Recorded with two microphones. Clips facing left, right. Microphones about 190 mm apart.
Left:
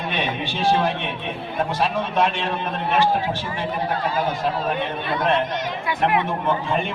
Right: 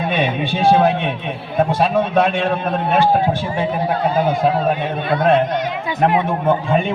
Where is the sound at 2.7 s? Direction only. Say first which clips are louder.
Right 3 dB; 50° right (ahead or behind).